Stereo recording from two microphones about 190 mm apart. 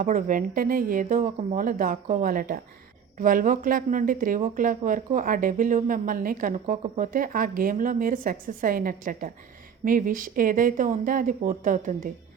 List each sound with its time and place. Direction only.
0.0 s speech: 45° right (ahead or behind)